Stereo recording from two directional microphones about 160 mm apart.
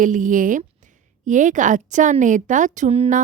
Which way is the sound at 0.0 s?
55° right (ahead or behind).